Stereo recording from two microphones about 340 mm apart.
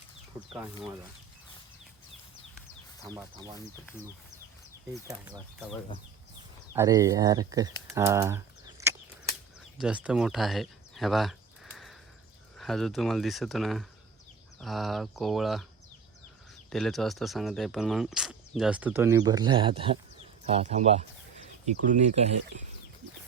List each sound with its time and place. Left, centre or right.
3.0 s speech: centre
6.7 s speech: centre
9.7 s a sound: centre
12.5 s speech: centre
16.6 s speech: centre